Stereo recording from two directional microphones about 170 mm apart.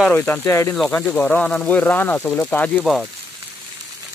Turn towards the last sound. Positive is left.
turn(degrees=5)  # may be behind; listen again after turning